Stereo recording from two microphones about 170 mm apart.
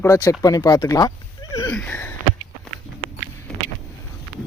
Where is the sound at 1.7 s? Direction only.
10° left (ahead or behind).